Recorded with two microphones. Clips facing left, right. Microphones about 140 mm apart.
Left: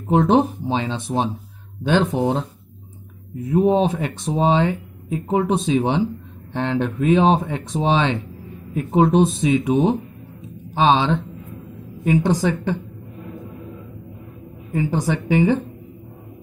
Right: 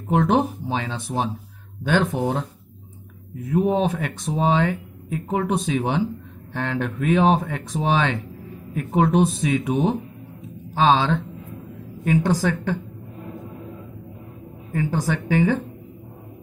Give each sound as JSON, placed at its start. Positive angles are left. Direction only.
{"t": 0.1, "sound": "speech", "side_deg": 25}
{"t": 3.4, "sound": "a woman's voice", "side_deg": 25}
{"t": 14.7, "sound": "speech", "side_deg": 20}